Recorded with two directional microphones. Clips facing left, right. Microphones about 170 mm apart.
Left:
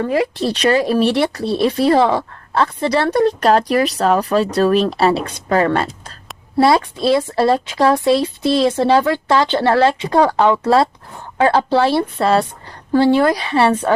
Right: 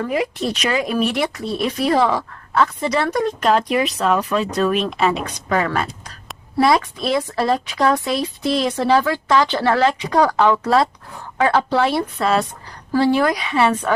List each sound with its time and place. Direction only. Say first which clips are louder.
0.1 s speech: left 4 dB; 30° left (ahead or behind)